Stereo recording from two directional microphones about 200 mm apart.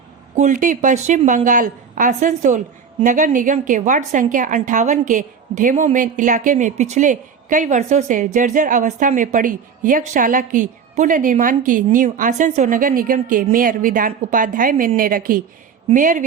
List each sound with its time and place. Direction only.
0.3 s a woman's voice: 40° right (ahead or behind)